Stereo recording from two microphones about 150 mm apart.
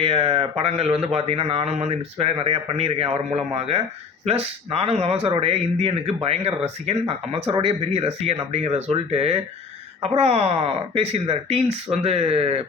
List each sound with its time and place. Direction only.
0.0 s speech: 40° right (ahead or behind)